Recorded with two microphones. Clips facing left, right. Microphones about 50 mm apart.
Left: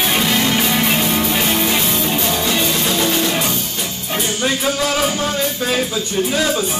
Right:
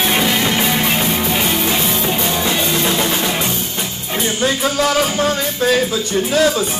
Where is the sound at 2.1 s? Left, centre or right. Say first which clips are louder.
Right 1 dB; centre.